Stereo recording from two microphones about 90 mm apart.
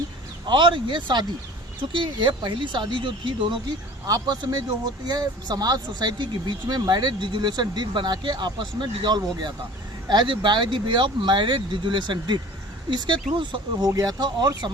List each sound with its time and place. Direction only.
0.4 s speech: 60° right (ahead or behind)
4.0 s speech: 50° right (ahead or behind)
13.9 s speech: 45° right (ahead or behind)